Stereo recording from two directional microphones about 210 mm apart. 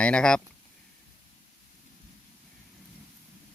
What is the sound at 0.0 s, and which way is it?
Speech, 5° left (ahead or behind).